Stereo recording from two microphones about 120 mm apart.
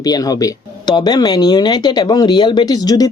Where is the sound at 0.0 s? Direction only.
30° left (ahead or behind).